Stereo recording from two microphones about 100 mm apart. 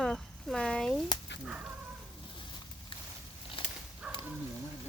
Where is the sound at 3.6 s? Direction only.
55° left (ahead or behind).